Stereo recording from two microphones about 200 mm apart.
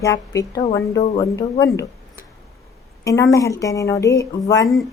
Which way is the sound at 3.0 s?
15° left (ahead or behind).